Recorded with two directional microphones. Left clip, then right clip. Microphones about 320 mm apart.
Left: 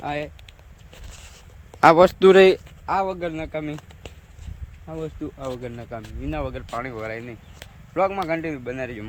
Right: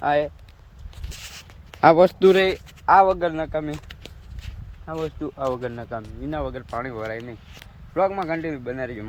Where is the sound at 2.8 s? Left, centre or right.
Centre.